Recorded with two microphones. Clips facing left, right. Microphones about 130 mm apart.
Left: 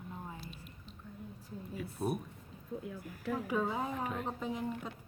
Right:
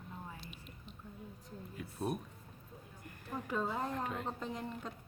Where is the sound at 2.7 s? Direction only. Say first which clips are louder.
Left 15 dB; 90° left.